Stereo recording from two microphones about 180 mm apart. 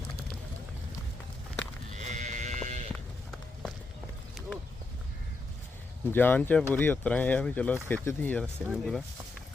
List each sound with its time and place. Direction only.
2.0 s clip-clop: 40° right (ahead or behind)
2.9 s run: centre (ahead or behind)
4.4 s a sound: centre (ahead or behind)
6.1 s speech: 10° left (ahead or behind)
8.6 s speech: centre (ahead or behind)